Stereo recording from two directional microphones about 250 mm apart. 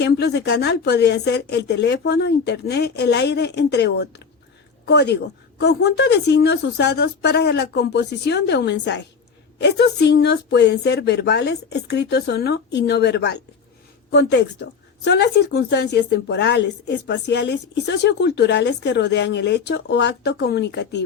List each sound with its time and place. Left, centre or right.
0.0 s a woman's voice: left